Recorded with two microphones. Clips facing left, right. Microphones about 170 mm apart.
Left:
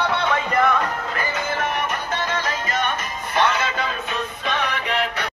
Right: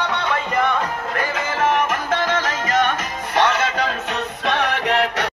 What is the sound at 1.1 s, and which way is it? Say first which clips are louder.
Music: right 2 dB; 85° right.